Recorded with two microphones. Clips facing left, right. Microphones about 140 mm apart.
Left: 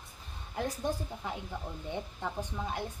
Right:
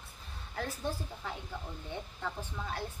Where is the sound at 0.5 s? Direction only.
15° left (ahead or behind).